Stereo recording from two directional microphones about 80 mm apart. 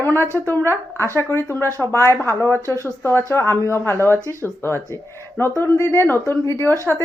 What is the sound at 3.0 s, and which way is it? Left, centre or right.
A woman's voice, left.